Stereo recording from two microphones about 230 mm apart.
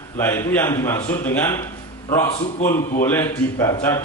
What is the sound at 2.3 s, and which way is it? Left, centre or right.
Speech, left.